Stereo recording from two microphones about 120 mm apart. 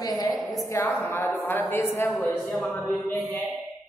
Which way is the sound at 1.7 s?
20° left (ahead or behind).